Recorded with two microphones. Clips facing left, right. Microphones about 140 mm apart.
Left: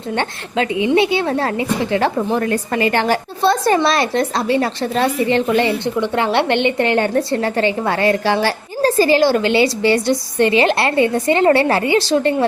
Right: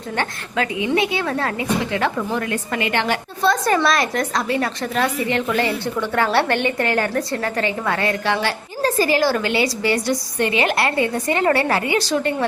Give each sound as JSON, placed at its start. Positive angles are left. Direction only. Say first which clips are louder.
{"t": 0.2, "sound": "a woman's voice", "louder": "left 2 dB", "side_deg": 25}